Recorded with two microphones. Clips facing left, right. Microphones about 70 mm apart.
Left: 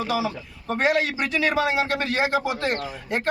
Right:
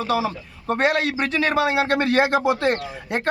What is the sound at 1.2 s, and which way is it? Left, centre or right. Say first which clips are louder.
Speech: right 2 dB; right.